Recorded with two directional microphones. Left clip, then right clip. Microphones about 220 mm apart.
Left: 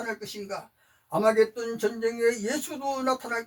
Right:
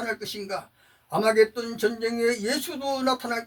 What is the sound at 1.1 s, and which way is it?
Speech, 45° right (ahead or behind).